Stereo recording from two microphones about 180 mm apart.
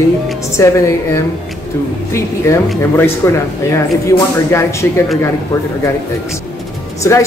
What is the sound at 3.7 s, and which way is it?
A woman's voice, 15° left (ahead or behind).